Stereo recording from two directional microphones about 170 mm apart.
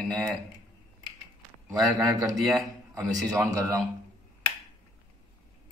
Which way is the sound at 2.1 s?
20° right (ahead or behind).